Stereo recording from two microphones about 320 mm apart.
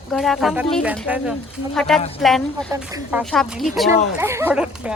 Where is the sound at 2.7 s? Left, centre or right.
Centre.